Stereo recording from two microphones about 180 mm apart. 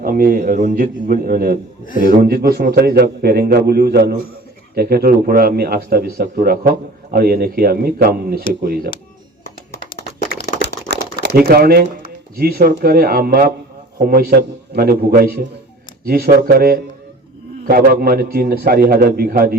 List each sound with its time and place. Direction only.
0.0 s a man's voice: 55° right (ahead or behind)
10.6 s a sound: 70° right (ahead or behind)
11.3 s speech: 60° right (ahead or behind)